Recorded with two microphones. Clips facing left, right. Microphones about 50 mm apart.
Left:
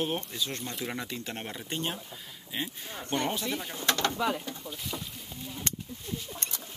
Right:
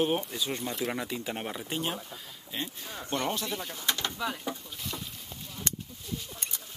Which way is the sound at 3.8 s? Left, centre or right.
Left.